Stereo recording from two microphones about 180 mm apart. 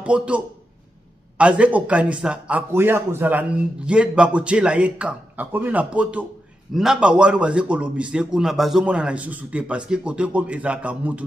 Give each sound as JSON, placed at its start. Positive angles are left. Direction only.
{"t": 0.0, "sound": "a man's voice", "side_deg": -5}
{"t": 1.4, "sound": "a man's voice", "side_deg": -5}